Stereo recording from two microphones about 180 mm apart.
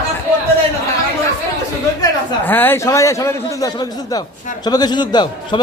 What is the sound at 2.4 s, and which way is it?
A man's voice, 10° left (ahead or behind).